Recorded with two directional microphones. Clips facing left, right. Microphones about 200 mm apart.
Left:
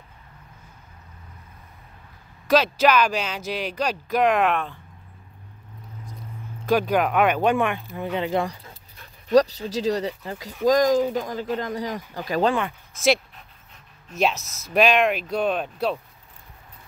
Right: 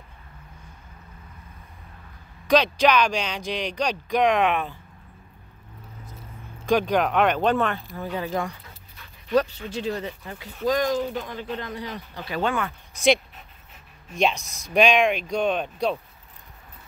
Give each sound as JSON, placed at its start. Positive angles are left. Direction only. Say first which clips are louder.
{"t": 2.4, "sound": "speech", "louder": "even", "side_deg": 5}
{"t": 6.6, "sound": "speech", "louder": "left 1 dB", "side_deg": 5}
{"t": 12.9, "sound": "speech", "louder": "right 1 dB", "side_deg": 0}